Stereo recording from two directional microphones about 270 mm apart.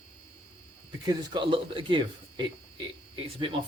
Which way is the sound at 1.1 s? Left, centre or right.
Centre.